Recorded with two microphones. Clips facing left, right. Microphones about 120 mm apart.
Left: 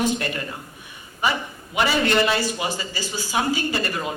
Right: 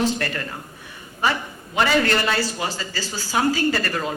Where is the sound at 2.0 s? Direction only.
20° left (ahead or behind).